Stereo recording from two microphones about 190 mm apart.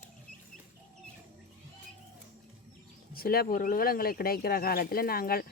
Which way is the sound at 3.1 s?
50° left (ahead or behind).